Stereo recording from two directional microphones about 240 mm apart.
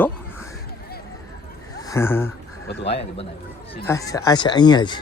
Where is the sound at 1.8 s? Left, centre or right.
Centre.